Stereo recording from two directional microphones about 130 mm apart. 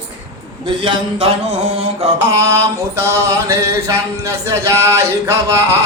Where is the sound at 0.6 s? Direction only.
45° right (ahead or behind).